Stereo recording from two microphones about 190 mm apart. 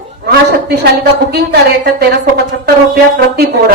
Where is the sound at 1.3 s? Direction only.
55° right (ahead or behind).